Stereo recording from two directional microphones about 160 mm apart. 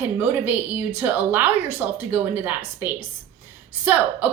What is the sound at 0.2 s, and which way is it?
A woman's voice, 10° right (ahead or behind).